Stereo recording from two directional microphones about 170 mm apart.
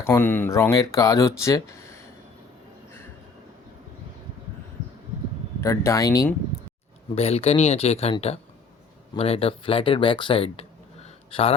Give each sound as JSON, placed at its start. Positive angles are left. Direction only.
{"t": 0.0, "sound": "speech", "side_deg": 10}
{"t": 5.5, "sound": "speech", "side_deg": 15}
{"t": 7.2, "sound": "speech", "side_deg": 35}